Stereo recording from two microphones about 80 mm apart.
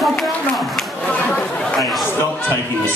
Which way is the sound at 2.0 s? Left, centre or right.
Left.